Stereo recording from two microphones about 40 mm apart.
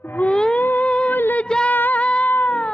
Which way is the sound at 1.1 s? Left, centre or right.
Left.